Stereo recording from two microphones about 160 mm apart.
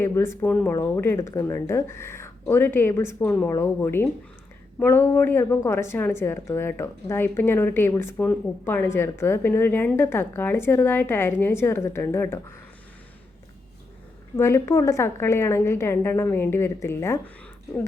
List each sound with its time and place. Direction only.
0.0 s a woman's voice: 15° left (ahead or behind)
14.3 s a woman's voice: 15° left (ahead or behind)